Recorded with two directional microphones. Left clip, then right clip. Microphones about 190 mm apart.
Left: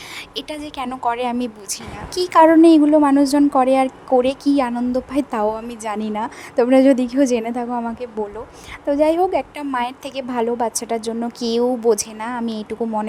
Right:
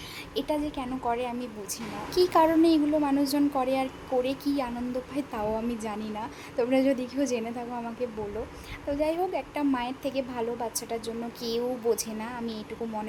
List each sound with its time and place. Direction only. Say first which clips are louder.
0.3 s a woman's voice: left 2 dB; 50° left (ahead or behind)
8.9 s a woman's voice: left 12 dB; 45° left (ahead or behind)